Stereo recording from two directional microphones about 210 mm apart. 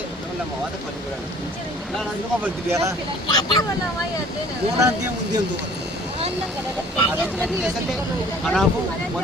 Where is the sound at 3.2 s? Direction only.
20° left (ahead or behind).